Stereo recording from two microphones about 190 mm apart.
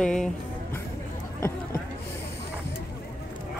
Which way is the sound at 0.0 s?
5° left (ahead or behind).